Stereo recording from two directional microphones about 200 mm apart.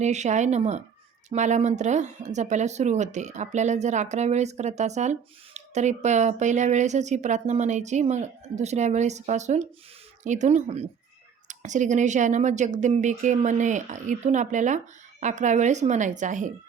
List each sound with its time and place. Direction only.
0.0 s a woman's voice: 35° right (ahead or behind)